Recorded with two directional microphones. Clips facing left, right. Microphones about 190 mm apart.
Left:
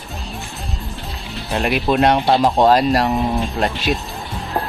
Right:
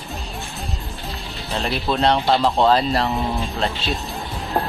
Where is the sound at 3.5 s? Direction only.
15° left (ahead or behind).